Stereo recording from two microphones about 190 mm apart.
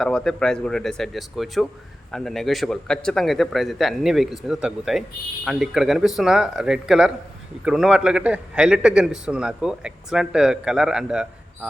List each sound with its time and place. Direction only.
0.0 s a man's voice: 5° left (ahead or behind)